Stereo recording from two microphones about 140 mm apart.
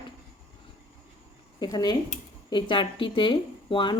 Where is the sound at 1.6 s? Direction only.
30° left (ahead or behind).